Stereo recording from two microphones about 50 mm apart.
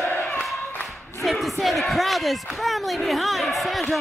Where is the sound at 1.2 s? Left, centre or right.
Centre.